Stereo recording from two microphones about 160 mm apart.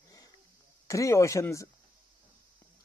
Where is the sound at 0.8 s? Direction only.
20° left (ahead or behind).